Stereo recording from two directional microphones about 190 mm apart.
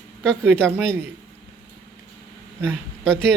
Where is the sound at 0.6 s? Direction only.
5° left (ahead or behind).